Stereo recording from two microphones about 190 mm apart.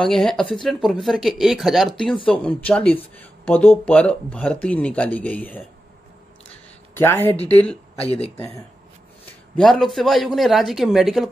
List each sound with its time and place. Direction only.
0.0 s speech: centre (ahead or behind)
6.5 s a sound: 10° left (ahead or behind)
8.4 s speech: 15° left (ahead or behind)
9.6 s speech: centre (ahead or behind)